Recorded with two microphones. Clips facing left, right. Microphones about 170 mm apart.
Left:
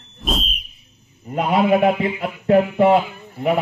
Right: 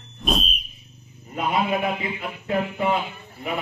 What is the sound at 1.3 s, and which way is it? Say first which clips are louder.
A man's voice: left 7 dB; 60° left (ahead or behind).